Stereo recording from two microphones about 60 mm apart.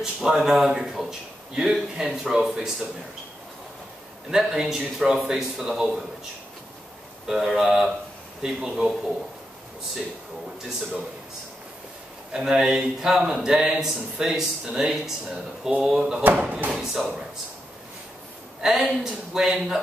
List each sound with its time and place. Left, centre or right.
0.0 s a man's voice: centre
4.3 s a man's voice: centre
7.2 s speech: centre
12.3 s a man's voice: centre
16.2 s speech: right
16.8 s speech: centre
18.6 s a man's voice: centre